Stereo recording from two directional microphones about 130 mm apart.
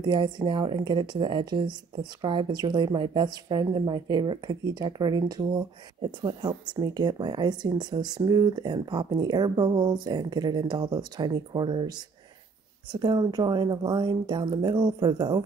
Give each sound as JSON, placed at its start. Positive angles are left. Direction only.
{"t": 0.0, "sound": "speech", "side_deg": -35}
{"t": 6.7, "sound": "speech", "side_deg": -30}